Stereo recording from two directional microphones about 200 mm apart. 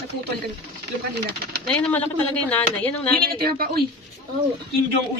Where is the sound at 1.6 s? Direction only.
5° left (ahead or behind).